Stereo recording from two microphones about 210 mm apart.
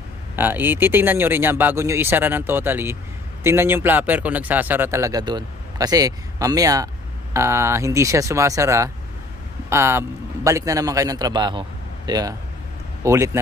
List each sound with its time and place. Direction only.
0.4 s speech: 10° right (ahead or behind)